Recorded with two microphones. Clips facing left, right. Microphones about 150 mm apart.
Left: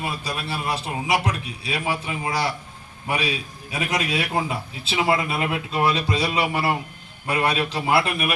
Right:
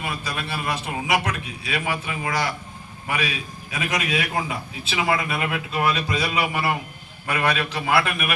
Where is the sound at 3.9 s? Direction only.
30° left (ahead or behind).